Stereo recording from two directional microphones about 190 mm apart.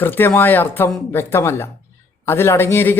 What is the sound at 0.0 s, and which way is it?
Speech, 10° left (ahead or behind).